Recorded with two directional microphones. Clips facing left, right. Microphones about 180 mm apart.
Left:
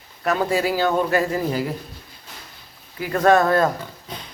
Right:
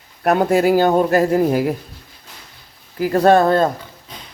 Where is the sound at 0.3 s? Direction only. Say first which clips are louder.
Right 6 dB; 55° right (ahead or behind).